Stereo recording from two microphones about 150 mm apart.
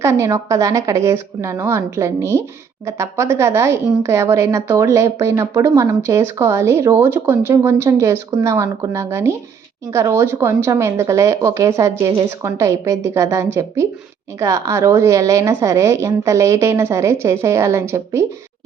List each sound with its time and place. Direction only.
0.0 s a woman's voice: 20° right (ahead or behind)